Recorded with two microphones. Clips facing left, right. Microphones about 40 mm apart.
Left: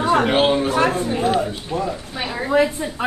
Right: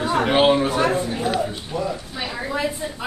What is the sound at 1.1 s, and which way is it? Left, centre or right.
Speech, left.